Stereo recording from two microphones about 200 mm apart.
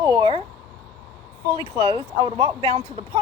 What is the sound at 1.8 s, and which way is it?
Speech, 20° right (ahead or behind).